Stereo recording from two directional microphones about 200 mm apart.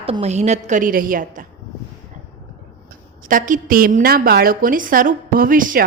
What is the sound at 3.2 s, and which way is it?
A woman's voice, 40° right (ahead or behind).